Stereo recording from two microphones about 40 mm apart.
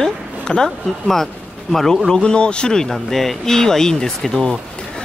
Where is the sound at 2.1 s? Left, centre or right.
Left.